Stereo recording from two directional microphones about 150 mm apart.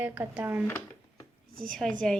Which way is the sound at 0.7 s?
15° left (ahead or behind).